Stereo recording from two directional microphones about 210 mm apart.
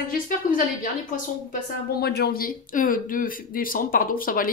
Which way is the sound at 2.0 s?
50° left (ahead or behind).